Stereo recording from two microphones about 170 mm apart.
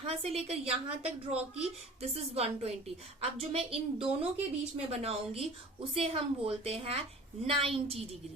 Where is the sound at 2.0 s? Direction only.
35° right (ahead or behind).